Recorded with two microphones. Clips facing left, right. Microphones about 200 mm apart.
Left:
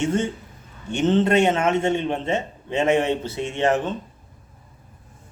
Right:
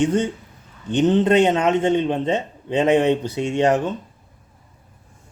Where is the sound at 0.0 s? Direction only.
15° right (ahead or behind).